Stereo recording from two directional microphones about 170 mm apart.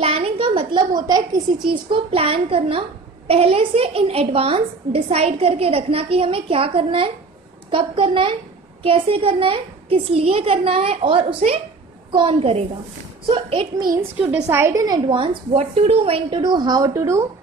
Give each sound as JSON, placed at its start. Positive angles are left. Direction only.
{"t": 0.0, "sound": "a sound", "side_deg": -35}
{"t": 1.0, "sound": "a woman's voice", "side_deg": -25}
{"t": 14.3, "sound": "a woman's voice", "side_deg": -10}